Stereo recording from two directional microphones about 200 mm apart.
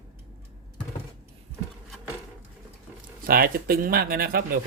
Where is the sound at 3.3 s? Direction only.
45° right (ahead or behind).